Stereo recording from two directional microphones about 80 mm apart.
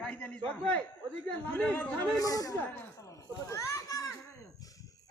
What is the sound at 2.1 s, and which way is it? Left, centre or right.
Speech, left.